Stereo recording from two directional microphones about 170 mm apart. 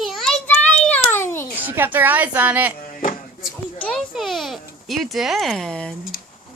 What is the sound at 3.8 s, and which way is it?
A child's voice, centre (ahead or behind).